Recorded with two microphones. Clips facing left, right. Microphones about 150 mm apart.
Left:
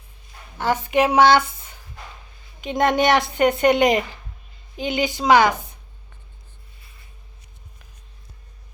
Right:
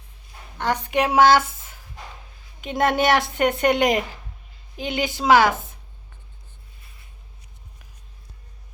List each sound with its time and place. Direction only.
0.6 s a woman's voice: 5° left (ahead or behind)